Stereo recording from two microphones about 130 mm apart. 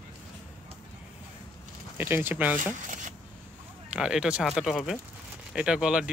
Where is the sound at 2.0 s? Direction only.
15° right (ahead or behind).